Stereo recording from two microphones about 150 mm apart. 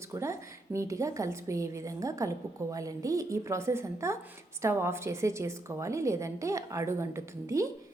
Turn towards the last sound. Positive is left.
turn(degrees=-20)  # may be behind; listen again after turning